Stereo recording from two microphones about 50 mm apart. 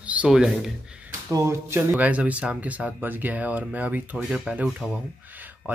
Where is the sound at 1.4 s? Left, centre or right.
Right.